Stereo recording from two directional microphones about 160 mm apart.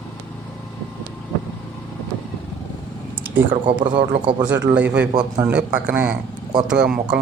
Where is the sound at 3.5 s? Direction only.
30° right (ahead or behind).